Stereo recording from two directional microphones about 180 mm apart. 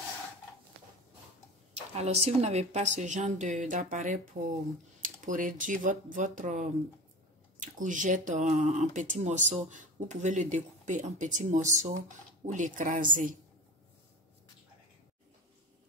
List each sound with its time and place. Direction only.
2.0 s a woman's voice: 35° right (ahead or behind)